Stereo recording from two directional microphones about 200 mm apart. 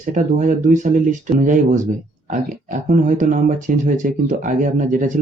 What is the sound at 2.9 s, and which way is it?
Speech, 40° right (ahead or behind).